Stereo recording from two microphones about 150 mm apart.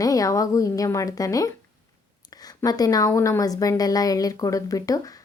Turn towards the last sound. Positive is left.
turn(degrees=25)  # may be behind; listen again after turning